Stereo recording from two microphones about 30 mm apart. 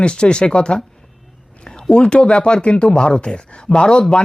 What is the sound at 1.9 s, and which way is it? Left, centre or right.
Speech, left.